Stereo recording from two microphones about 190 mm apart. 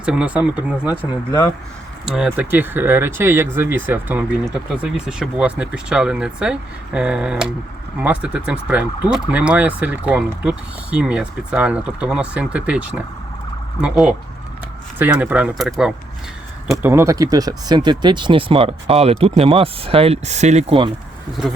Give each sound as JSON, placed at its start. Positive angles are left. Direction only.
{"t": 0.0, "sound": "speech", "side_deg": -5}
{"t": 13.8, "sound": "speech", "side_deg": -5}
{"t": 16.7, "sound": "speech", "side_deg": -15}